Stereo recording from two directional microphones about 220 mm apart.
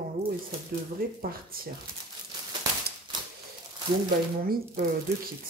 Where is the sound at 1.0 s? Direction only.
40° right (ahead or behind).